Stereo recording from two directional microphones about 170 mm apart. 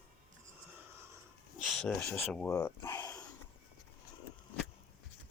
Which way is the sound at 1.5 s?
Centre (ahead or behind).